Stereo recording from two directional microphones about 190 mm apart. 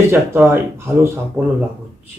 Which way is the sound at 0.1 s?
15° right (ahead or behind).